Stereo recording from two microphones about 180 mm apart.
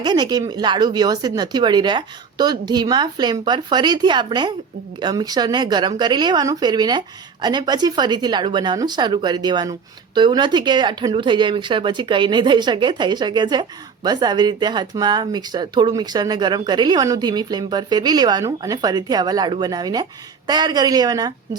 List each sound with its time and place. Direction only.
0.0 s speech: 25° right (ahead or behind)